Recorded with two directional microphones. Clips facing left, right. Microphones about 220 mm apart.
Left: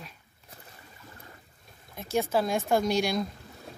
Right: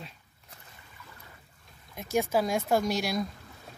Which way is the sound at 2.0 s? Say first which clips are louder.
Even; 15° right (ahead or behind).